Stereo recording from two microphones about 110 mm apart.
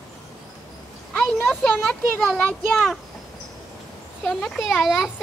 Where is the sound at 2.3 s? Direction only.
Centre (ahead or behind).